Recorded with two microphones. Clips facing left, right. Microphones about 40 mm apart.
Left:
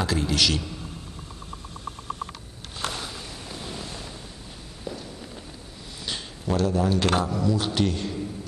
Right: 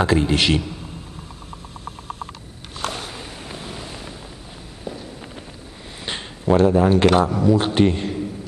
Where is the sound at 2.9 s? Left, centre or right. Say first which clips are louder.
Right 3 dB; right.